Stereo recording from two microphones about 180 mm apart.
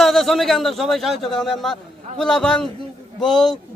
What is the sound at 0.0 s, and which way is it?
A man's voice, centre (ahead or behind).